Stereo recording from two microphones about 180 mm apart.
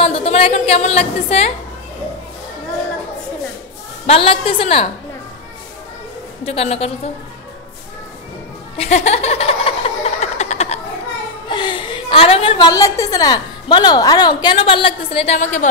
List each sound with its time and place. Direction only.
0.0 s a woman's voice: 35° left (ahead or behind)
4.0 s a woman's voice: 35° left (ahead or behind)
6.4 s a woman's voice: 35° left (ahead or behind)
8.7 s a sound: 35° left (ahead or behind)
11.4 s a woman's voice: 25° left (ahead or behind)